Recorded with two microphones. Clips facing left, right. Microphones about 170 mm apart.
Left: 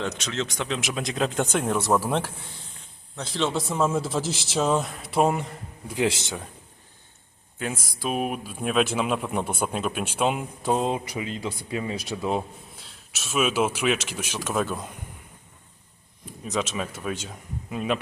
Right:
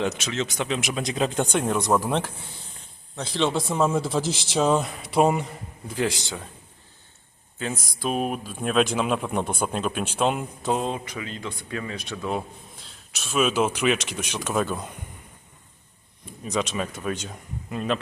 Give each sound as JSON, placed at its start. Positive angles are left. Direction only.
{"t": 0.0, "sound": "speech", "side_deg": -5}
{"t": 5.9, "sound": "speech", "side_deg": 20}
{"t": 7.6, "sound": "speech", "side_deg": 5}
{"t": 13.1, "sound": "speech", "side_deg": 5}
{"t": 16.4, "sound": "speech", "side_deg": 0}